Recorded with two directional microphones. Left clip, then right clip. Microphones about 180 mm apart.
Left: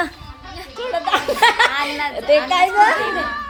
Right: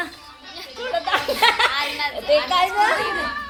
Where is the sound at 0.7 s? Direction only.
20° left (ahead or behind).